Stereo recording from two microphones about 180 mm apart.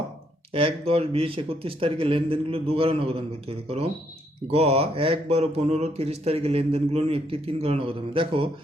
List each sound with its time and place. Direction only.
0.5 s speech: 30° right (ahead or behind)